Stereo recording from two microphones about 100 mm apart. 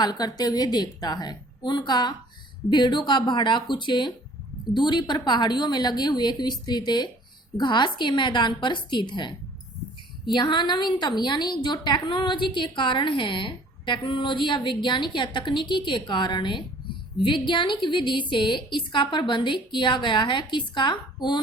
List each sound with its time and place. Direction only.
0.0 s a woman's voice: 45° left (ahead or behind)
10.3 s a woman's voice: 50° left (ahead or behind)